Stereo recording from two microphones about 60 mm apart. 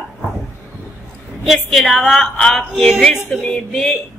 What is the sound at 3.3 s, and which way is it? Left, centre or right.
Speech, centre.